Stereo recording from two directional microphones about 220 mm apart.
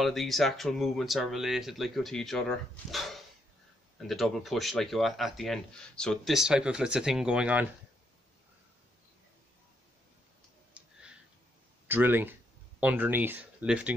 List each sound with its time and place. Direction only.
0.0 s speech: centre (ahead or behind)
10.7 s a sound: 5° right (ahead or behind)
11.9 s speech: 10° right (ahead or behind)